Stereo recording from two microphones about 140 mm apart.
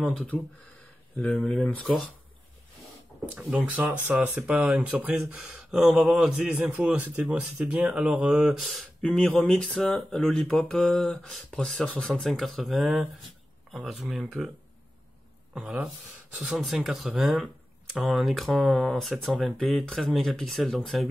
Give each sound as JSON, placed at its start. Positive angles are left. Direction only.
{"t": 0.0, "sound": "speech", "side_deg": 5}
{"t": 3.3, "sound": "speech", "side_deg": -10}
{"t": 15.5, "sound": "speech", "side_deg": -5}